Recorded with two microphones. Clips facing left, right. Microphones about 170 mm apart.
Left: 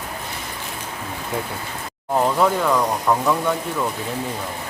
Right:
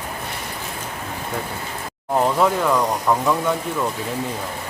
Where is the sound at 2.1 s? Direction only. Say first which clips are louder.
Even; centre (ahead or behind).